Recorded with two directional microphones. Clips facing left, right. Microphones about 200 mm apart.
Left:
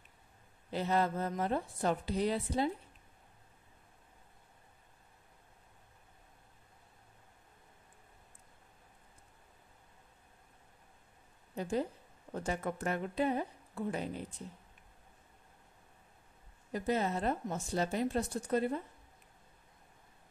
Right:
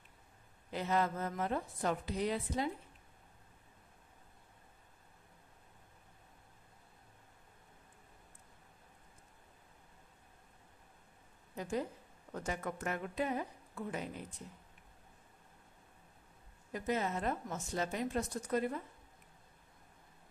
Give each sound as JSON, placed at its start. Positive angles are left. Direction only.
{"t": 0.7, "sound": "a woman's voice", "side_deg": 30}
{"t": 12.4, "sound": "a woman's voice", "side_deg": 30}
{"t": 16.7, "sound": "a woman's voice", "side_deg": 35}